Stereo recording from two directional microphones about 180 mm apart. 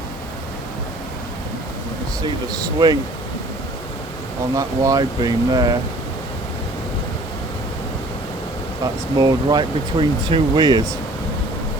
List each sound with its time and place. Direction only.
2.2 s speech: 20° right (ahead or behind)
4.5 s speech: 20° right (ahead or behind)
8.8 s speech: 25° right (ahead or behind)